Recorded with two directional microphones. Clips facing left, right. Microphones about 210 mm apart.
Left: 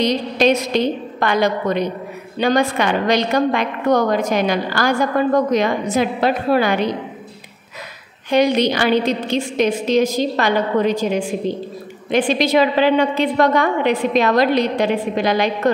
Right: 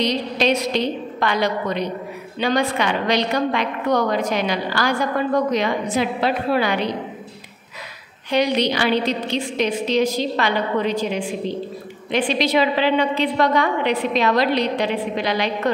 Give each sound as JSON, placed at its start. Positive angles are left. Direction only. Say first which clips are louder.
{"t": 0.0, "sound": "a woman's voice", "louder": "left 4 dB", "side_deg": 45}
{"t": 8.3, "sound": "a woman's voice", "louder": "left 4 dB", "side_deg": 45}